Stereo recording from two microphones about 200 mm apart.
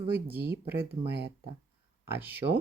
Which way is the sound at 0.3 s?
50° right (ahead or behind).